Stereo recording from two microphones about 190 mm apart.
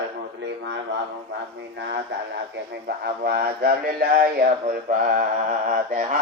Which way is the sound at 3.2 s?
55° right (ahead or behind).